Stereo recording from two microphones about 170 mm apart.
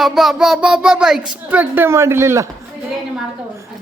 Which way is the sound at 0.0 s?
Centre (ahead or behind).